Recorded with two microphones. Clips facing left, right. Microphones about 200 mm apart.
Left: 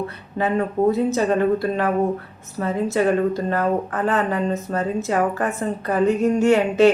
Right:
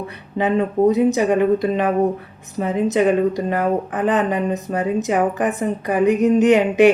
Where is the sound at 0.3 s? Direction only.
20° right (ahead or behind).